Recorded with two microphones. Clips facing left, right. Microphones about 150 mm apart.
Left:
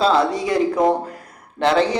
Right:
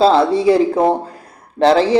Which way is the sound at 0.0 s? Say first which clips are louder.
Right 6 dB; 30° right (ahead or behind).